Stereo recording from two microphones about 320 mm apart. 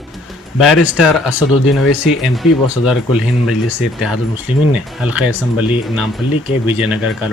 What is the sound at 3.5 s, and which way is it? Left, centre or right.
Speech, left.